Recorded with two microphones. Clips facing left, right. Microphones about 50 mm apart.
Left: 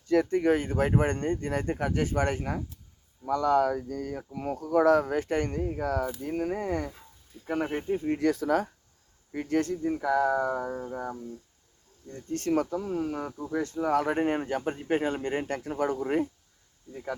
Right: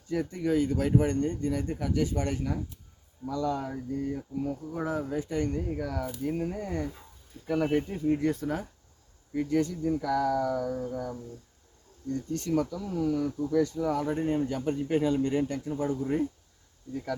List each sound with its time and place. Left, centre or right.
0.1 s speech: left
3.2 s speech: left
5.8 s speech: left
6.6 s speech: left
7.4 s speech: left
8.0 s speech: left
9.3 s speech: left
10.0 s speech: left
12.3 s speech: left
14.0 s speech: left
14.4 s speech: left
15.6 s speech: left